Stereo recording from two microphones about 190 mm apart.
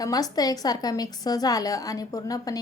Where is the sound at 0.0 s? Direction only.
20° left (ahead or behind).